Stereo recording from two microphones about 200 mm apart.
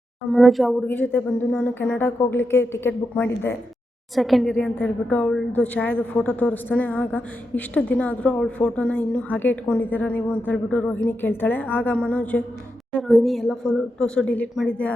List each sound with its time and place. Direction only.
0.3 s a woman's voice: centre (ahead or behind)
4.1 s a woman's voice: centre (ahead or behind)